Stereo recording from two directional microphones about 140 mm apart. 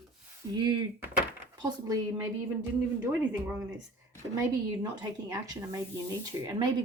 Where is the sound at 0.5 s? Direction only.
30° right (ahead or behind).